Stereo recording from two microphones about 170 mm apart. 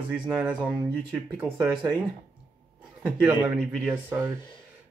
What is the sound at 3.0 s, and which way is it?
A man's voice, 10° right (ahead or behind).